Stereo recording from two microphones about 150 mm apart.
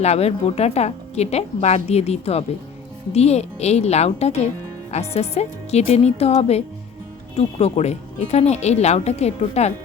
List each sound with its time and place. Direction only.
0.0 s speech: 45° left (ahead or behind)